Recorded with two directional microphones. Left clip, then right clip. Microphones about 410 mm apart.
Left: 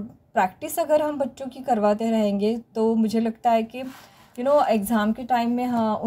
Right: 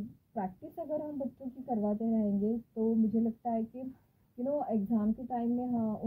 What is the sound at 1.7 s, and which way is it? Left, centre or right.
A woman's voice, left.